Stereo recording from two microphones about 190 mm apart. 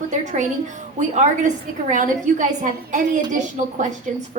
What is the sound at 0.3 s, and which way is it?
A woman's voice, 40° right (ahead or behind).